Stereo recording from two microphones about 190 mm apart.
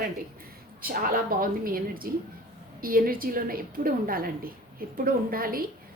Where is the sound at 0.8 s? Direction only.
50° right (ahead or behind).